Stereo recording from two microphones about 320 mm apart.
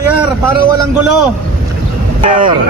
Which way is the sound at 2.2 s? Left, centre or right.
Centre.